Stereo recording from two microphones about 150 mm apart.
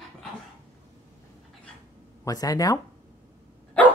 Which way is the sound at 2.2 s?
25° left (ahead or behind).